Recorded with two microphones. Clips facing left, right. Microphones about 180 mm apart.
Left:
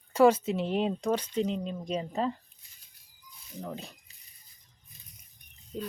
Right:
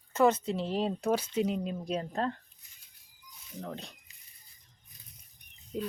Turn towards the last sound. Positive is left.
turn(degrees=-10)  # may be behind; listen again after turning